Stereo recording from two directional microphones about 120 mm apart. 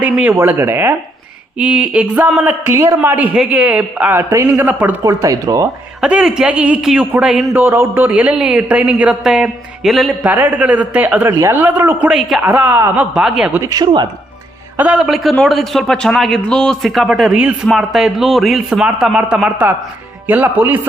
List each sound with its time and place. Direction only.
0.0 s speech: 10° right (ahead or behind)
4.6 s speech: 15° right (ahead or behind)
5.0 s speech: 30° right (ahead or behind)
6.0 s speech: 5° right (ahead or behind)
7.6 s speech: 20° right (ahead or behind); by 10.2 s centre (ahead or behind)
10.2 s speech: 15° right (ahead or behind)
12.0 s speech: 5° right (ahead or behind)
12.4 s speech: 15° right (ahead or behind)
13.6 s speech: 30° right (ahead or behind)
14.8 s speech: 10° right (ahead or behind)